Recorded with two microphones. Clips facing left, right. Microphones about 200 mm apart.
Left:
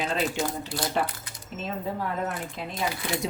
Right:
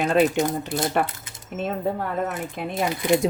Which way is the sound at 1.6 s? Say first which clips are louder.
Right 7 dB; 55° right (ahead or behind).